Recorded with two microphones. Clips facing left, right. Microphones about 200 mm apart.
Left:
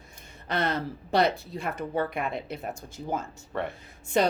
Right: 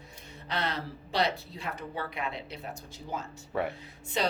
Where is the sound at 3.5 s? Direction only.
5° right (ahead or behind).